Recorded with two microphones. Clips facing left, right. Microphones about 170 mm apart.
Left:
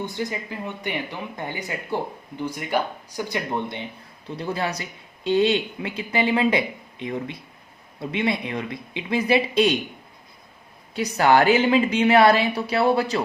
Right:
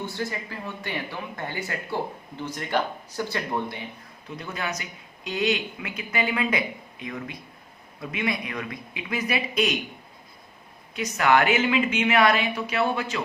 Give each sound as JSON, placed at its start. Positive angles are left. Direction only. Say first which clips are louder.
{"t": 0.0, "sound": "a man's voice", "louder": "left 2 dB", "side_deg": 15}
{"t": 10.9, "sound": "speech", "louder": "left 3 dB", "side_deg": 35}